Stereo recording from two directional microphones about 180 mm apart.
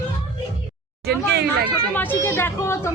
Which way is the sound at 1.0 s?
60° right (ahead or behind).